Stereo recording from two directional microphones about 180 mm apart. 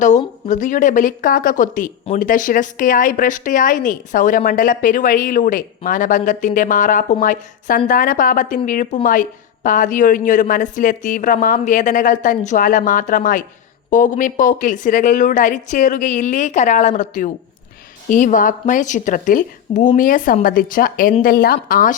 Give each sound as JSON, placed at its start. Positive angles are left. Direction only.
{"t": 0.4, "sound": "speech", "side_deg": 45}